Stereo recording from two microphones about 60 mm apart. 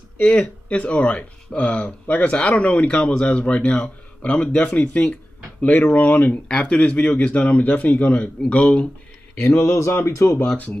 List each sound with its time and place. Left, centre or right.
0.2 s speech: centre
5.6 s speech: left
9.6 s speech: left